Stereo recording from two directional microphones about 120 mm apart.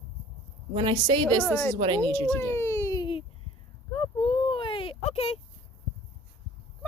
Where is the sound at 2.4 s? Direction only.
20° left (ahead or behind).